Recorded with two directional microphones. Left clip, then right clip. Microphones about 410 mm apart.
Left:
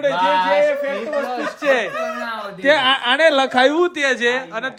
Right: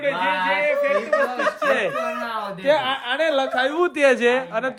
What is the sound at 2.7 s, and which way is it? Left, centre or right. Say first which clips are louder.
Speech: left 5 dB; left.